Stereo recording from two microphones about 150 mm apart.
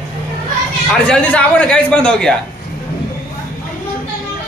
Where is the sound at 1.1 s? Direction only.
10° left (ahead or behind).